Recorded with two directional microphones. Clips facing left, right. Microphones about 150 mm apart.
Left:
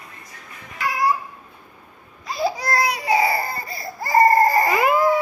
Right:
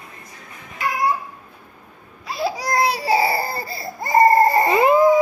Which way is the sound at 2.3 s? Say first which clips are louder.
Left 1 dB; centre (ahead or behind).